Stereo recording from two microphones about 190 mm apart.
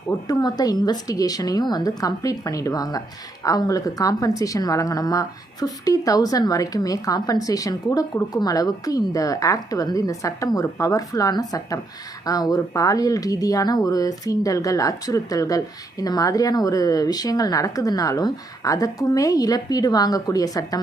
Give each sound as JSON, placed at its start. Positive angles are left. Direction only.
{"t": 0.3, "sound": "speech", "side_deg": 20}